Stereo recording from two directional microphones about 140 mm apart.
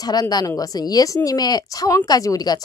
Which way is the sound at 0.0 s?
30° left (ahead or behind).